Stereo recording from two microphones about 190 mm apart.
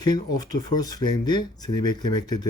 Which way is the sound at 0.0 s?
20° left (ahead or behind).